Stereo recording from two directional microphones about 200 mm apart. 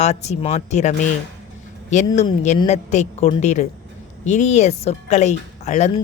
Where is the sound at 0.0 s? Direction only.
35° left (ahead or behind).